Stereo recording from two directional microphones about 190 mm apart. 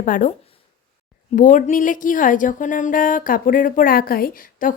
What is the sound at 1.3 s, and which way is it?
Speech, 45° left (ahead or behind).